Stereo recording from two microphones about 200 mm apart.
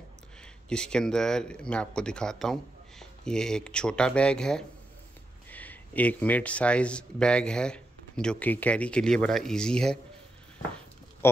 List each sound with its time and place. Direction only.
0.7 s speech: 5° left (ahead or behind)